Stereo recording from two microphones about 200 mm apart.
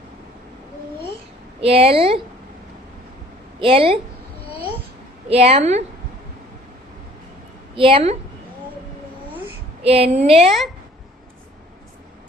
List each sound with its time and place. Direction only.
1.6 s speech: 30° right (ahead or behind)
3.6 s speech: 25° right (ahead or behind)
5.3 s a woman's voice: 30° right (ahead or behind)
7.8 s speech: 25° right (ahead or behind)
9.8 s a woman's voice: 30° right (ahead or behind)